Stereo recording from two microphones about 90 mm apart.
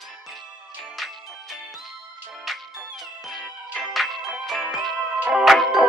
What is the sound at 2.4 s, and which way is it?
Music, centre (ahead or behind).